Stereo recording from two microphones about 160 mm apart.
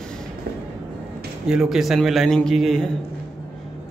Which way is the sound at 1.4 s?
5° right (ahead or behind).